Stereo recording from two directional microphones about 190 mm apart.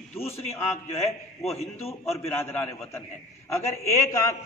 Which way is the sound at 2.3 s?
10° left (ahead or behind).